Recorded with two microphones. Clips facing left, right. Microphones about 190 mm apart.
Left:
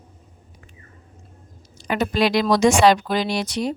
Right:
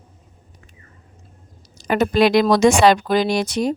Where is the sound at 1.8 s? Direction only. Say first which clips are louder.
Right 5 dB; 45° right (ahead or behind).